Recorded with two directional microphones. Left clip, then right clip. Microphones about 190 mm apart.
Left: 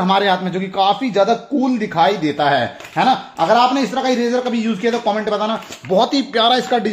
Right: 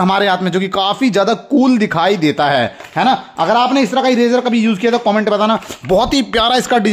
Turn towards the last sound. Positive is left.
turn(degrees=-45)  # may be behind; listen again after turning